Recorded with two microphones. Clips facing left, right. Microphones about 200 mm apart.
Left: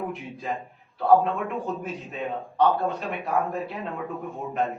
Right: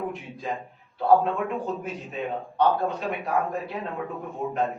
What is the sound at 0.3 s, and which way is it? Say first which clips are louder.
A man's voice: even; centre (ahead or behind).